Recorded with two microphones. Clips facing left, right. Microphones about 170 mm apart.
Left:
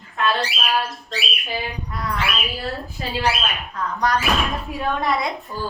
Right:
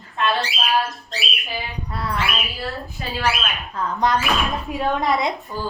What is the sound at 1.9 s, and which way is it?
Speech, 30° right (ahead or behind).